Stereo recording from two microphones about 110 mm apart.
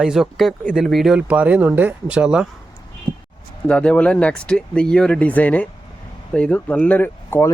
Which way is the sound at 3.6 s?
10° left (ahead or behind).